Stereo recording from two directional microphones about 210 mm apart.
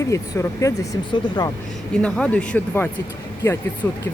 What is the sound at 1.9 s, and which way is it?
Speech, 5° left (ahead or behind).